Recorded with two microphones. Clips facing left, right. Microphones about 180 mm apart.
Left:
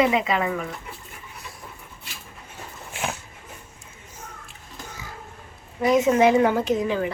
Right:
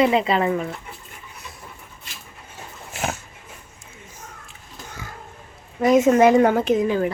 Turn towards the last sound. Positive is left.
turn(degrees=-50)  # may be behind; listen again after turning